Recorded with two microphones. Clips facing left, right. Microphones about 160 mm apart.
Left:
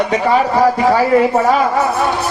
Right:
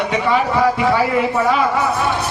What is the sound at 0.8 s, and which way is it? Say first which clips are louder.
Speech: left 5 dB; 45° left (ahead or behind).